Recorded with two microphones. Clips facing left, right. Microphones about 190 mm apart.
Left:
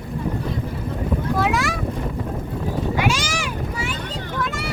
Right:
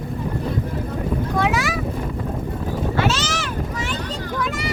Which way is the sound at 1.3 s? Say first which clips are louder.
Right 1 dB; centre (ahead or behind).